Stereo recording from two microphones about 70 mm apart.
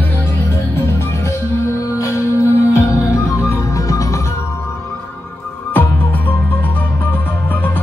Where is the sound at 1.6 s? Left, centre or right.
Left.